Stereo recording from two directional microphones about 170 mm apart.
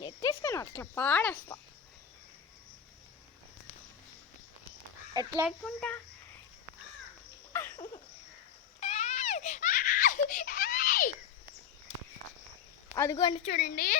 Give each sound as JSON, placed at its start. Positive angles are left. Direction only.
{"t": 0.0, "sound": "speech", "side_deg": 20}
{"t": 5.2, "sound": "a child's voice", "side_deg": -25}
{"t": 5.5, "sound": "a child's voice", "side_deg": 5}
{"t": 7.5, "sound": "a sound", "side_deg": 15}
{"t": 8.8, "sound": "giggle", "side_deg": 40}
{"t": 13.0, "sound": "a woman's voice", "side_deg": 20}
{"t": 13.4, "sound": "a woman's voice", "side_deg": 50}